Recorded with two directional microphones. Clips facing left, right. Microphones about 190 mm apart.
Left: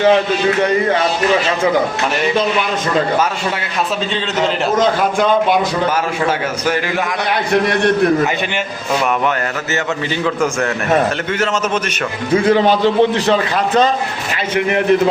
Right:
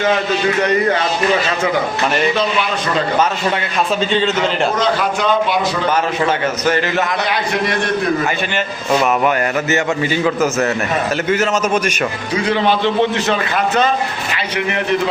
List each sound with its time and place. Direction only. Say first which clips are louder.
4.8 s a man's voice: left 3 dB; 50° left (ahead or behind)
6.2 s a man's voice: right 1 dB; 10° left (ahead or behind)
10.2 s a man's voice: even; 5° right (ahead or behind)
12.3 s a man's voice: left 5 dB; 45° left (ahead or behind)
14.5 s a man's voice: left 5 dB; 50° left (ahead or behind)